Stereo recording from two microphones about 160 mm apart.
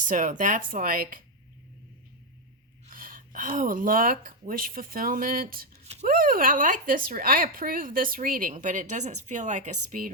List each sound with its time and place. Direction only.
0.0 s speech: 55° right (ahead or behind)
2.9 s speech: 60° right (ahead or behind)
5.8 s a sound: 45° right (ahead or behind)
6.1 s a woman's voice: 60° right (ahead or behind)